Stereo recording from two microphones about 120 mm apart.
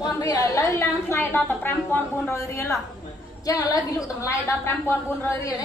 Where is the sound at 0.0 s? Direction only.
30° left (ahead or behind).